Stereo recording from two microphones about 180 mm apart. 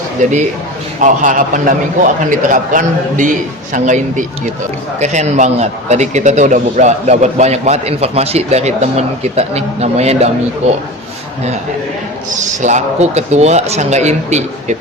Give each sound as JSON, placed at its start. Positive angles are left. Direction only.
{"t": 0.2, "sound": "a man's voice", "side_deg": -40}
{"t": 12.6, "sound": "a man's voice", "side_deg": -40}